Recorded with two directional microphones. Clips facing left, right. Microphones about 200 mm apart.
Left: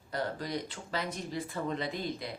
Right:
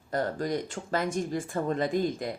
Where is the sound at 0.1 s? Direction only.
45° right (ahead or behind).